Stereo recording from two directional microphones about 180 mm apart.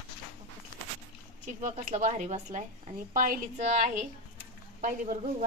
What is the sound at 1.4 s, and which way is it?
A woman's voice, 40° right (ahead or behind).